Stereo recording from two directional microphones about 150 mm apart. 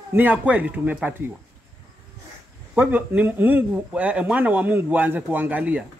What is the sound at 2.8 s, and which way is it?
A man's voice, 10° right (ahead or behind).